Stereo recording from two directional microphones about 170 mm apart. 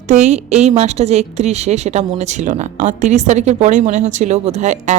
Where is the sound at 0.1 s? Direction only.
40° right (ahead or behind).